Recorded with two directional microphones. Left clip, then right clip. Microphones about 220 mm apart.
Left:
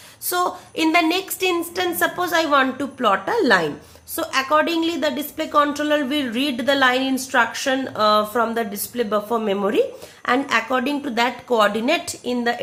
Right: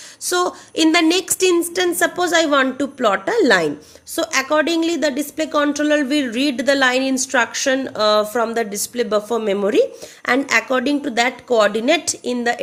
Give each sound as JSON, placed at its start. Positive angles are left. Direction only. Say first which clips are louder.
{"t": 0.3, "sound": "a woman's voice", "louder": "right 2 dB", "side_deg": -30}